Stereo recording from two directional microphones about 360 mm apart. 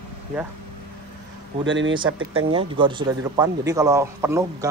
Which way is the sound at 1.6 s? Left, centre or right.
Right.